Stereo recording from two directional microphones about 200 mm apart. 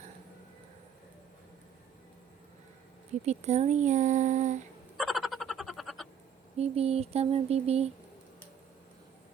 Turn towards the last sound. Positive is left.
turn(degrees=-30)  # may be behind; listen again after turning